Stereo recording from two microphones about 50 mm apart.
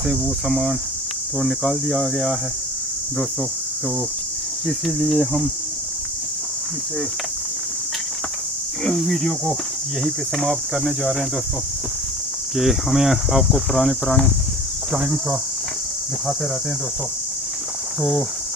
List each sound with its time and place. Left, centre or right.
0.0 s speech: centre
4.6 s speech: centre
8.8 s speech: centre
12.5 s speech: centre
15.0 s speech: right